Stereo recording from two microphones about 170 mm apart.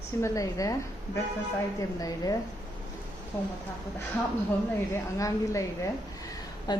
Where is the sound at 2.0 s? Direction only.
20° left (ahead or behind).